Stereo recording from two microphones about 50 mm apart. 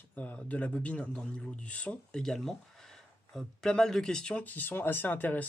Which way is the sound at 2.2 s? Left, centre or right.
Centre.